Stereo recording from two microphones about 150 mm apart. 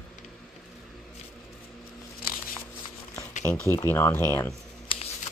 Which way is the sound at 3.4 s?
15° left (ahead or behind).